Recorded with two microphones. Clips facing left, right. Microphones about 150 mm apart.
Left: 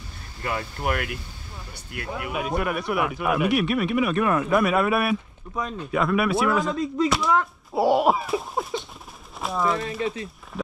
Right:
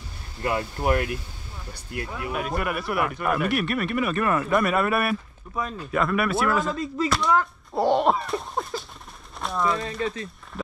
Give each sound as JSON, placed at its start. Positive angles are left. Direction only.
{"t": 0.4, "sound": "speech", "side_deg": -20}
{"t": 2.3, "sound": "speech", "side_deg": 0}